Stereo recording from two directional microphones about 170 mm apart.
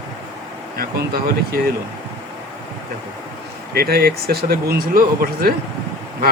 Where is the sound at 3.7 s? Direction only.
65° right (ahead or behind).